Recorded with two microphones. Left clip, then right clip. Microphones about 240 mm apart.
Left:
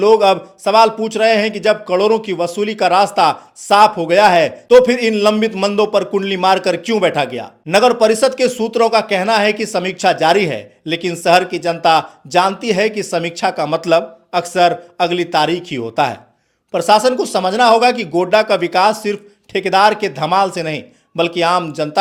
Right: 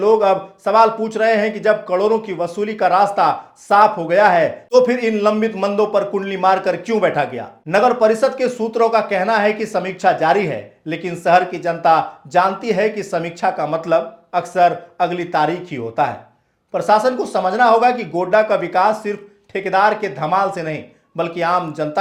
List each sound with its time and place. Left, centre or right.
0.0 s speech: left